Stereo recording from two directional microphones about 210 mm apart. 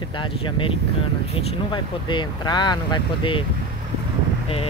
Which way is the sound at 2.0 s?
20° left (ahead or behind).